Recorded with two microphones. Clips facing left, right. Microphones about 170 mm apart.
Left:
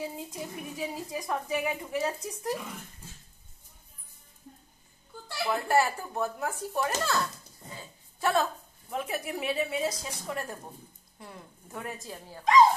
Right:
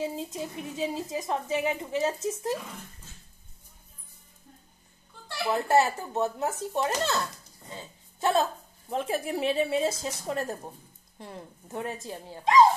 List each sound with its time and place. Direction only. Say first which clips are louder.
0.0 s speech: right 4 dB; 25° right (ahead or behind)
5.5 s speech: right 3 dB; 25° right (ahead or behind)
7.7 s a sound: right 4 dB; 25° right (ahead or behind)
8.9 s speech: right 4 dB; 30° right (ahead or behind)